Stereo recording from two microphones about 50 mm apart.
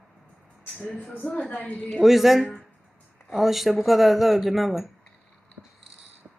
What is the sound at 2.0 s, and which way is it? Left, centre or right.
Speech, centre.